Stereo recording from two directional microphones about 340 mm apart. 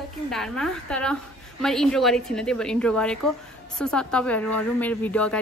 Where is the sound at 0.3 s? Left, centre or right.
Centre.